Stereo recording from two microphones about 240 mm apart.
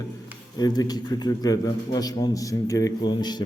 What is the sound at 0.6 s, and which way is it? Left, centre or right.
A man's voice, centre.